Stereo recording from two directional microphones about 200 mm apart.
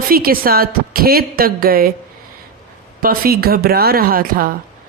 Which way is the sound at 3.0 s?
45° right (ahead or behind).